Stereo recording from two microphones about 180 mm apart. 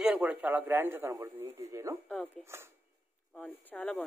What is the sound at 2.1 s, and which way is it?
Speech, 5° left (ahead or behind).